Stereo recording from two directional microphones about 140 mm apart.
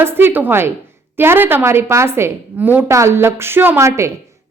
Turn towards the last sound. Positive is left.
turn(degrees=-20)  # may be behind; listen again after turning